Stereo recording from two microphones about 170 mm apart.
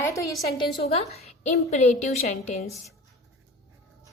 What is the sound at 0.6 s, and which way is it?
A woman's voice, 35° left (ahead or behind).